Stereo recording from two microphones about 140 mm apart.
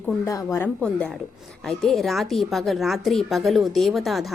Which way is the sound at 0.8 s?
5° left (ahead or behind).